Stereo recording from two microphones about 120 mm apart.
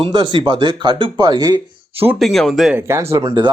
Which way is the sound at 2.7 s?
20° right (ahead or behind).